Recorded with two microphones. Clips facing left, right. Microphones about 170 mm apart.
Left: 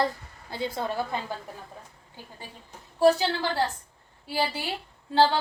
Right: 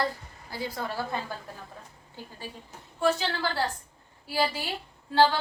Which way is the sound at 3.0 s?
35° left (ahead or behind).